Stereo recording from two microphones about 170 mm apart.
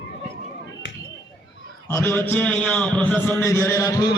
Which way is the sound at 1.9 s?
15° left (ahead or behind).